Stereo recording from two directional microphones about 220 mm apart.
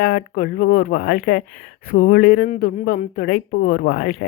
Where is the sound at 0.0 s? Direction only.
45° left (ahead or behind).